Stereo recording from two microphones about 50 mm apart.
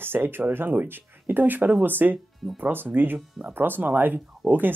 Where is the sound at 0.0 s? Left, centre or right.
Right.